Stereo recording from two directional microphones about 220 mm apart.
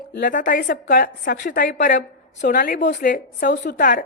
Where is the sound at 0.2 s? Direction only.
40° left (ahead or behind).